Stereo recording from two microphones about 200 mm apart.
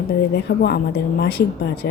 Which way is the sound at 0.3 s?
55° left (ahead or behind).